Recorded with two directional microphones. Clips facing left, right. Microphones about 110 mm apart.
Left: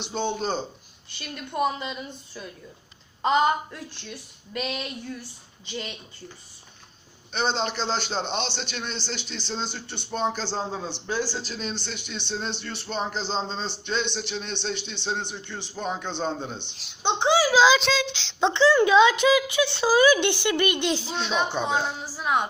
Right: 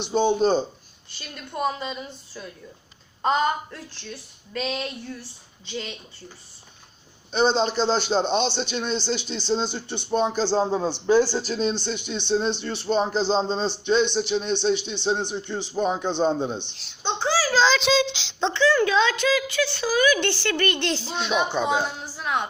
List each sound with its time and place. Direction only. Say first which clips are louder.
0.0 s a man's voice: right 8 dB; 15° right (ahead or behind)
1.5 s speech: even; 10° left (ahead or behind)
7.3 s a man's voice: right 6 dB; 15° right (ahead or behind)
10.5 s a man's voice: right 8 dB; 40° right (ahead or behind)
11.6 s a man's voice: right 8 dB; 20° right (ahead or behind)
16.7 s speech: left 2 dB; 15° left (ahead or behind)
17.9 s speech: right 5 dB; 25° right (ahead or behind)
18.7 s speech: left 3 dB; 15° left (ahead or behind)
20.2 s speech: left 1 dB; 15° left (ahead or behind)
21.2 s speech: right 6 dB; centre (ahead or behind)